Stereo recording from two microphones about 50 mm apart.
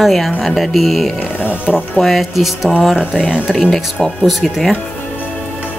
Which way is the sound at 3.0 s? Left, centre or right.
Centre.